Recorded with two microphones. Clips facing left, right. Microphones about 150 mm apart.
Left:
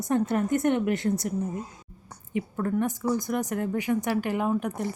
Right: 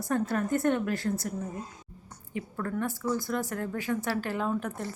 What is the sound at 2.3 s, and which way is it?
A woman's voice, 20° left (ahead or behind).